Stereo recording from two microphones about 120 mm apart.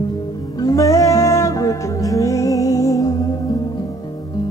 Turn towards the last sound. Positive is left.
turn(degrees=30)  # may be behind; listen again after turning